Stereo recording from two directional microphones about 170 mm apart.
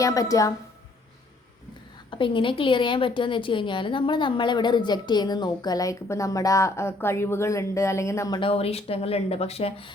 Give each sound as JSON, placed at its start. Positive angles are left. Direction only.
{"t": 0.0, "sound": "a woman's voice", "side_deg": 20}
{"t": 2.0, "sound": "a woman's voice", "side_deg": 30}
{"t": 8.4, "sound": "speech", "side_deg": 35}